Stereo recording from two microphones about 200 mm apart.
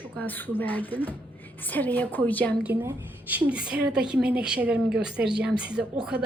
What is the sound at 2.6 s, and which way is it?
A woman's voice, 10° right (ahead or behind).